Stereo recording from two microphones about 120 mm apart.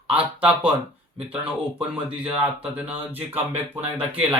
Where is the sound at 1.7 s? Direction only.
10° right (ahead or behind).